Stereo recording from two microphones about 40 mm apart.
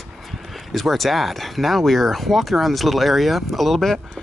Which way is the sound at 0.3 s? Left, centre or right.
Centre.